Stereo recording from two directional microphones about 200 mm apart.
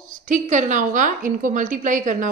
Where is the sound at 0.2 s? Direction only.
40° right (ahead or behind).